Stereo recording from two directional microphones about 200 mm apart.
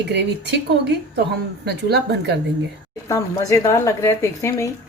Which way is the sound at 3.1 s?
15° left (ahead or behind).